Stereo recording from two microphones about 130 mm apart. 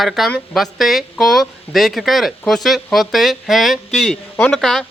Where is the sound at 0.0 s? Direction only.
Centre (ahead or behind).